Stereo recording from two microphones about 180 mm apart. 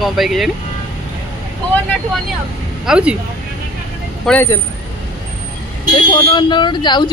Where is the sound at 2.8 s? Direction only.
5° right (ahead or behind).